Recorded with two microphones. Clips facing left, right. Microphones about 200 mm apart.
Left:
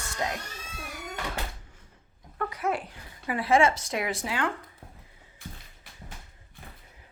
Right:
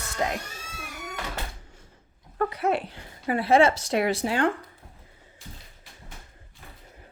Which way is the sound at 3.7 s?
70° right (ahead or behind).